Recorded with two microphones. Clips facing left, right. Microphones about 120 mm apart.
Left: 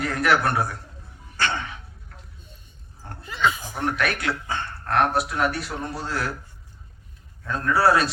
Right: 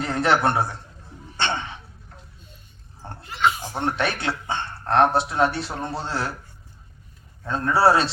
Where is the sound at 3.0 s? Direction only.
25° right (ahead or behind).